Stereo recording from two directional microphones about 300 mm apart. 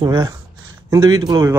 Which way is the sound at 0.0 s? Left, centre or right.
Centre.